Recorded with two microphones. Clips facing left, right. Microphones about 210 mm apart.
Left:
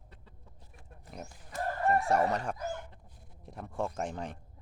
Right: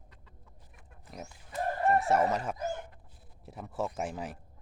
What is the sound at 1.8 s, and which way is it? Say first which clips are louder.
Speech: right 1 dB; centre (ahead or behind).